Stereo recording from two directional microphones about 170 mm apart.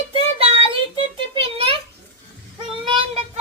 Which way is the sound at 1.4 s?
35° right (ahead or behind).